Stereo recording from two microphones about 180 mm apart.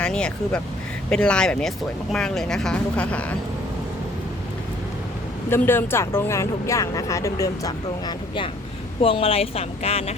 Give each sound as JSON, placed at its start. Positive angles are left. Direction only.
{"t": 0.0, "sound": "speech", "side_deg": 5}
{"t": 5.5, "sound": "speech", "side_deg": 10}
{"t": 9.0, "sound": "speech", "side_deg": 30}